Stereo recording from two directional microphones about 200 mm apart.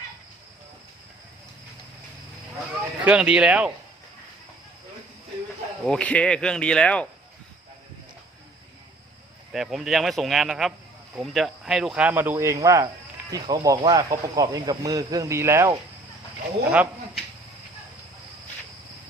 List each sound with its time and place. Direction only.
3.0 s speech: 5° right (ahead or behind)
5.8 s speech: 5° left (ahead or behind)
9.5 s speech: centre (ahead or behind)
16.6 s a sound: 10° right (ahead or behind)